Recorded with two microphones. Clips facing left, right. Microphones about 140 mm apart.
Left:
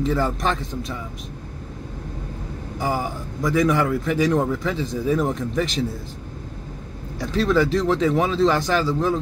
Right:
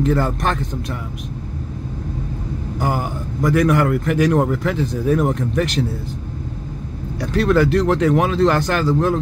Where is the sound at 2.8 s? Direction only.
65° right (ahead or behind).